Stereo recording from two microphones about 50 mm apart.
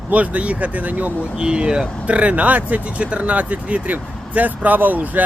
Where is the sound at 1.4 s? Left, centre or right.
Centre.